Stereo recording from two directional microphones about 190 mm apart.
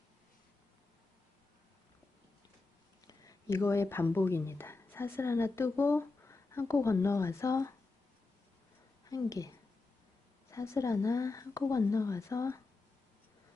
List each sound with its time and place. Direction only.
3.1 s speech: 15° left (ahead or behind)
9.0 s speech: 20° left (ahead or behind)
10.5 s speech: 15° left (ahead or behind)